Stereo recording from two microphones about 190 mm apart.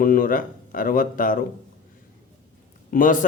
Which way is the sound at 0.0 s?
50° left (ahead or behind).